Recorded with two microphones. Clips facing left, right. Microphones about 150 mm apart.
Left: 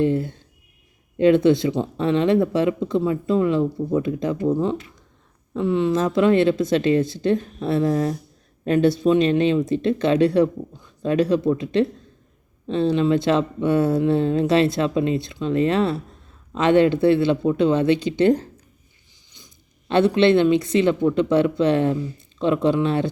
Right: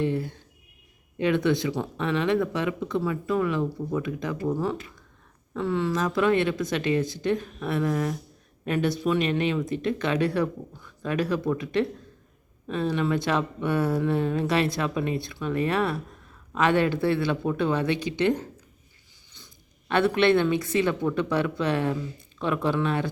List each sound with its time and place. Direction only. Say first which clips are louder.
0.0 s speech: left 6 dB; 25° left (ahead or behind)
19.9 s speech: left 5 dB; 25° left (ahead or behind)